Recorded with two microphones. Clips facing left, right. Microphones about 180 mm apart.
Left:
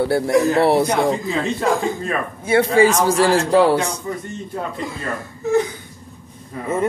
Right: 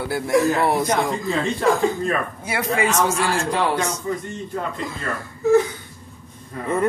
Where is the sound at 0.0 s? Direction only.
30° left (ahead or behind).